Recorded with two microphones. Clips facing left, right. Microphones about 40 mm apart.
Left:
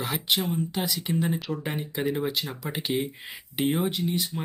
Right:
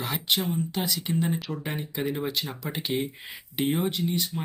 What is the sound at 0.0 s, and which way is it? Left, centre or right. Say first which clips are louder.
Speech: left 1 dB; centre.